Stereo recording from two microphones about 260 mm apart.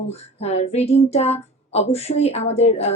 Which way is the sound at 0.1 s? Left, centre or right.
Left.